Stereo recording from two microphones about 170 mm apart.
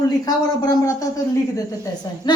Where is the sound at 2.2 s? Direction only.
25° left (ahead or behind).